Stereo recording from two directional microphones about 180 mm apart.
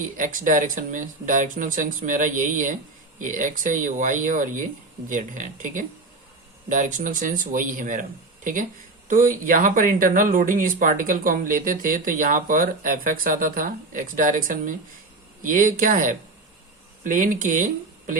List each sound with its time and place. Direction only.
0.0 s speech: 45° right (ahead or behind)
9.0 s speech: 45° right (ahead or behind)